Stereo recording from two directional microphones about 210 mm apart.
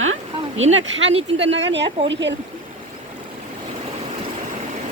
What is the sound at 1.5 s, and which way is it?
Speech, 60° right (ahead or behind).